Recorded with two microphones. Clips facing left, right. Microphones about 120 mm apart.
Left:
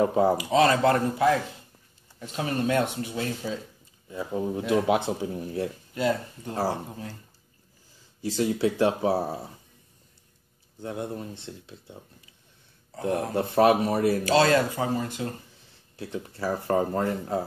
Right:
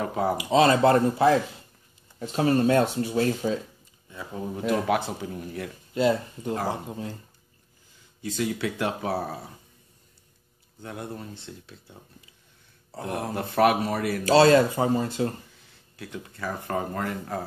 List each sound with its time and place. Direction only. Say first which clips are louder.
0.0 s speech: left 5 dB; 25° left (ahead or behind)
0.4 s speech: right 2 dB; 25° right (ahead or behind)
4.1 s speech: left 5 dB; 30° left (ahead or behind)
5.9 s speech: right 3 dB; 20° right (ahead or behind)
8.2 s speech: left 4 dB; 30° left (ahead or behind)
10.8 s speech: left 4 dB; 25° left (ahead or behind)
13.0 s speech: left 4 dB; 30° left (ahead or behind)
14.2 s speech: right 7 dB; 35° right (ahead or behind)
16.0 s speech: left 4 dB; 30° left (ahead or behind)